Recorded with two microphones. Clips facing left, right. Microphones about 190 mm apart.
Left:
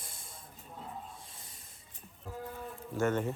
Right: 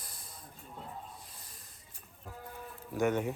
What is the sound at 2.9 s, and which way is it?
Speech, 15° right (ahead or behind).